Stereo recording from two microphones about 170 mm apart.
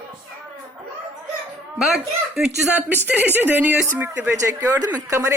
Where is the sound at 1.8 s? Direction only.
5° right (ahead or behind).